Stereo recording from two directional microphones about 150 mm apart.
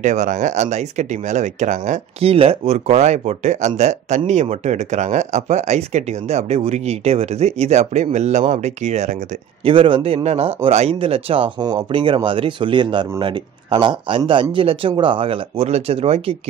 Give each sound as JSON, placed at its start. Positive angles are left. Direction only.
{"t": 0.0, "sound": "speech", "side_deg": -55}
{"t": 2.2, "sound": "speech", "side_deg": -40}
{"t": 9.7, "sound": "speech", "side_deg": -35}